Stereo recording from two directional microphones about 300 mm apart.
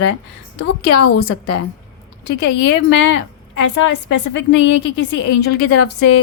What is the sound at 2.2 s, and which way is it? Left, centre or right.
A woman's voice, left.